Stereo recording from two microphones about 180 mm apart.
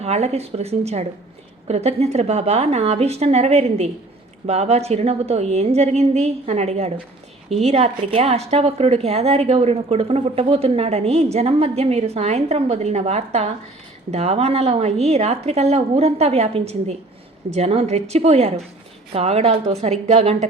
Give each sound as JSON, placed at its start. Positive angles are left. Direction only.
{"t": 0.0, "sound": "a woman's voice", "side_deg": -35}